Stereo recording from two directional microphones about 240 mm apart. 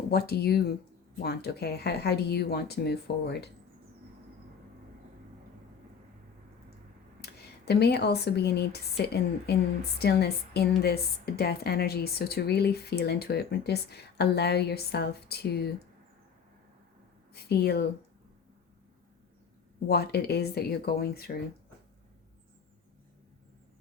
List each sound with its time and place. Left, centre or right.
0.1 s a woman's voice: left
7.2 s a woman's voice: left
17.3 s speech: left
19.9 s speech: left